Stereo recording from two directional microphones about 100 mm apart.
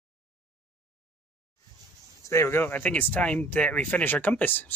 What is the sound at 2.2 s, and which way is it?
Speech, 25° left (ahead or behind).